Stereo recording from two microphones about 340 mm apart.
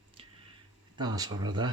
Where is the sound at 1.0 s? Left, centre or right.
Centre.